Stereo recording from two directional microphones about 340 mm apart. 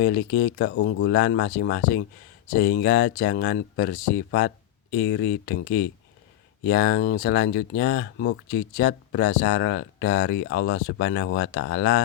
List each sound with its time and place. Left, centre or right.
0.0 s speech: left